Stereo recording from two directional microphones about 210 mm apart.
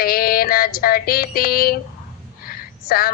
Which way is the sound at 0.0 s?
45° left (ahead or behind).